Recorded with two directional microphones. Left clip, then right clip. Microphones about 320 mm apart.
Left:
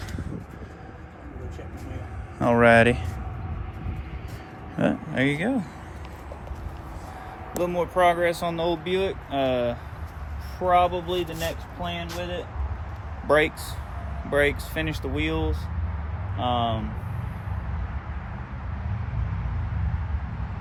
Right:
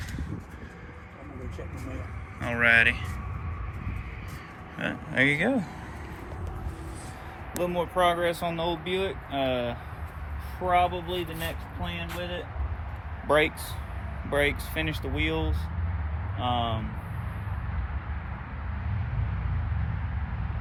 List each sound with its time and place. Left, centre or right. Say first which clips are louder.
2.4 s speech: left 4 dB; centre
4.8 s speech: left 1 dB; centre
7.5 s speech: left 3 dB; centre